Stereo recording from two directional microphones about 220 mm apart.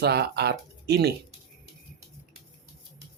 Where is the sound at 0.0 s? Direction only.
45° right (ahead or behind).